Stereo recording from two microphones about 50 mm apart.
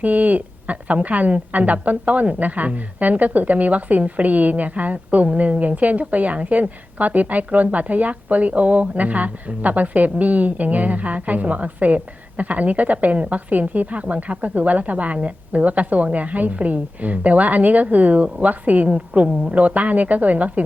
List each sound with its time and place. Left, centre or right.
0.0 s a woman's voice: right